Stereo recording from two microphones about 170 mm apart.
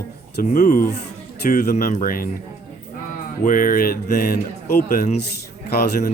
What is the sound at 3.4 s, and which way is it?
Speech, 50° left (ahead or behind).